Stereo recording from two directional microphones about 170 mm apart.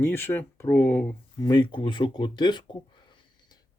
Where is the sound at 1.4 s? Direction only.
25° left (ahead or behind).